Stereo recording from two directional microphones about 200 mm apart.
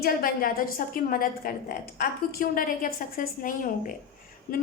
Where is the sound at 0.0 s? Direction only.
45° left (ahead or behind).